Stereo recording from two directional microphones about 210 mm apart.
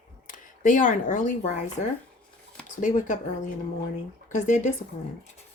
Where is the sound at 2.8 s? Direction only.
35° left (ahead or behind).